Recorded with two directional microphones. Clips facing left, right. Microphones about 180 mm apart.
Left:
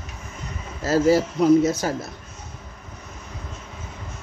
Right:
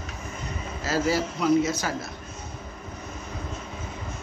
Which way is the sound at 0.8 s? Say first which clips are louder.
Left 7 dB; 45° left (ahead or behind).